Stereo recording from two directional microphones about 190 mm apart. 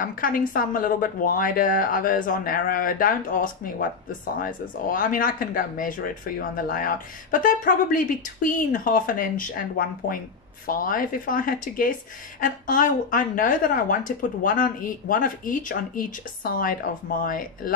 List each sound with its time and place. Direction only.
0.0 s speech: 45° left (ahead or behind)